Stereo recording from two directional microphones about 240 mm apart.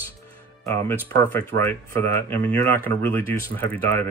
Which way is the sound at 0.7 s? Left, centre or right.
Centre.